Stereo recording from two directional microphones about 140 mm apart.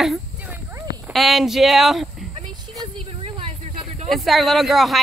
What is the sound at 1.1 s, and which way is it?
Speech, centre (ahead or behind).